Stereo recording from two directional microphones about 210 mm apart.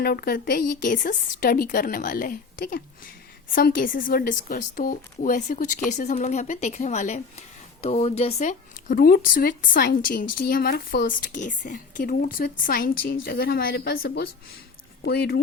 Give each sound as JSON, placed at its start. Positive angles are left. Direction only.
{"t": 0.0, "sound": "a woman's voice", "side_deg": 45}